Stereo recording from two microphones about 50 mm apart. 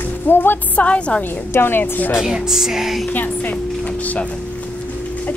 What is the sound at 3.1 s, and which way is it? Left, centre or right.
Speech, left.